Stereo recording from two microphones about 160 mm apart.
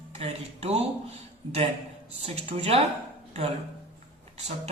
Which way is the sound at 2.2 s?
40° right (ahead or behind).